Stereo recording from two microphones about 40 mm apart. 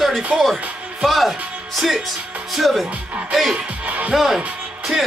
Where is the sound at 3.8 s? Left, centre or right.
Right.